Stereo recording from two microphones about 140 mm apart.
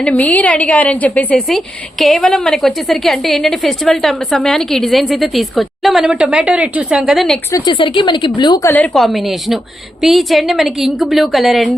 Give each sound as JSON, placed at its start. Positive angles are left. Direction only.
{"t": 0.0, "sound": "a woman's voice", "side_deg": 10}
{"t": 7.5, "sound": "speech", "side_deg": 35}
{"t": 8.6, "sound": "a woman's voice", "side_deg": 10}
{"t": 8.9, "sound": "a woman's voice", "side_deg": 0}